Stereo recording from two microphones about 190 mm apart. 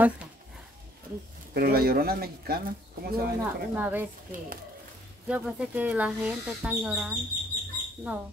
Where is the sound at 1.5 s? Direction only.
50° right (ahead or behind).